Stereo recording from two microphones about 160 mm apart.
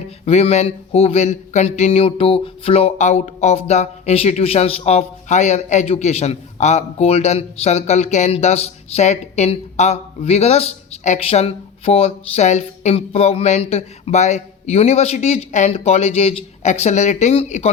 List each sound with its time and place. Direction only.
0.3 s speech: 40° left (ahead or behind)